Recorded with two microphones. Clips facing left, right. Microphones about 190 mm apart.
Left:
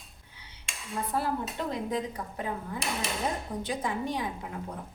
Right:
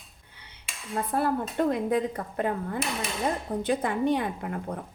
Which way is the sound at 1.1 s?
55° right (ahead or behind).